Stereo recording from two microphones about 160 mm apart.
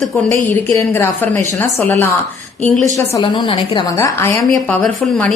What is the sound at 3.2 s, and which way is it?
Speech, 30° left (ahead or behind).